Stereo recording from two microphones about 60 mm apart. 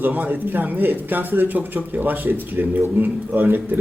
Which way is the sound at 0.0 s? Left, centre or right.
Right.